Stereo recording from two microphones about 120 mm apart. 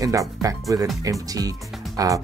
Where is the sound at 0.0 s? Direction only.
30° right (ahead or behind).